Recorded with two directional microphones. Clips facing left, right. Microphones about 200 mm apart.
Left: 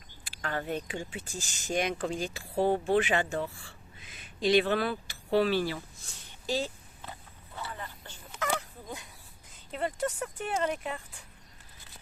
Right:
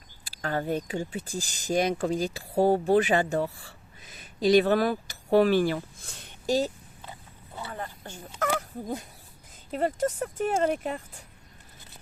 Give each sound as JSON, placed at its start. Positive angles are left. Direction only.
{"t": 0.4, "sound": "speech", "side_deg": -40}
{"t": 7.7, "sound": "a sound", "side_deg": -45}
{"t": 9.7, "sound": "speech", "side_deg": -40}